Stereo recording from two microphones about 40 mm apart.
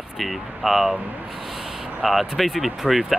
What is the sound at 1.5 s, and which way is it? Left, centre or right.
Vehicle, centre.